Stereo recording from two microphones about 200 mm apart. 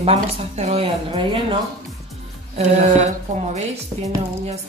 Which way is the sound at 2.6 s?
35° right (ahead or behind).